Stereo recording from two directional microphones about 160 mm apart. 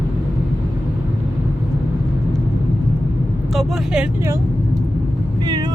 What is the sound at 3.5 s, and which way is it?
Speech, 5° right (ahead or behind).